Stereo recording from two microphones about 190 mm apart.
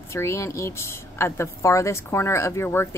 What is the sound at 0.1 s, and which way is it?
A woman's voice, 15° left (ahead or behind).